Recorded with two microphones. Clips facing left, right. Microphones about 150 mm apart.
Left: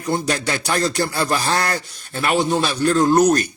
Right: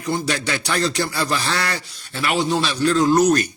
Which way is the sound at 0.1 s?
45° left (ahead or behind).